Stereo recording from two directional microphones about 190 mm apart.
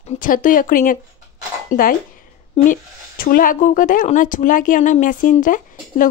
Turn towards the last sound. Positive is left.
turn(degrees=45)  # may be behind; listen again after turning